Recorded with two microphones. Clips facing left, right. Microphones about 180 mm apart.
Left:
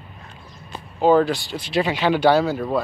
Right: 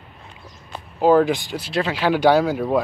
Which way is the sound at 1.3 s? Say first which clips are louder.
Right 2 dB; 15° right (ahead or behind).